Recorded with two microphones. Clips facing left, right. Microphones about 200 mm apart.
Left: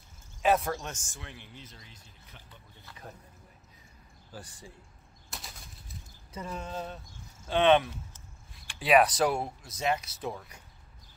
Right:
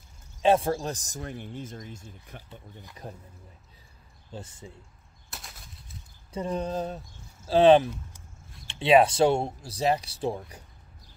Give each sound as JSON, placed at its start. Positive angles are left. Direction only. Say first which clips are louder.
{"t": 0.4, "sound": "speech", "louder": "right 4 dB", "side_deg": -30}
{"t": 3.0, "sound": "speech", "louder": "right 5 dB", "side_deg": -30}
{"t": 4.3, "sound": "speech", "louder": "right 5 dB", "side_deg": -25}
{"t": 5.3, "sound": "bird flight", "louder": "even", "side_deg": 0}
{"t": 6.3, "sound": "speech", "louder": "right 8 dB", "side_deg": -35}